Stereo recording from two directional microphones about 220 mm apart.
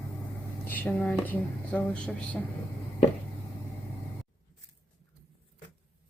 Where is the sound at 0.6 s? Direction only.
10° left (ahead or behind).